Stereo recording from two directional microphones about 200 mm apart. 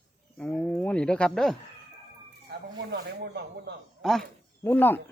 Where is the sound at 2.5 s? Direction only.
55° right (ahead or behind).